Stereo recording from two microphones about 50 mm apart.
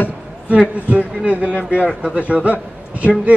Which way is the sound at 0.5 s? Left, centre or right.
Right.